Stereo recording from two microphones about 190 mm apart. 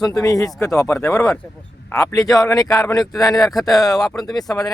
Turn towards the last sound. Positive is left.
turn(degrees=20)  # may be behind; listen again after turning